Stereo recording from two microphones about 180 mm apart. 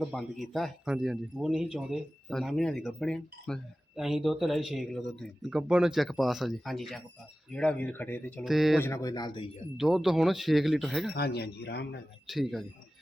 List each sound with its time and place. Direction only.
0.0 s speech: centre (ahead or behind)
8.4 s speech: centre (ahead or behind)
8.8 s speech: 15° left (ahead or behind)
9.7 s speech: centre (ahead or behind)
11.1 s speech: 65° left (ahead or behind)
12.3 s speech: centre (ahead or behind)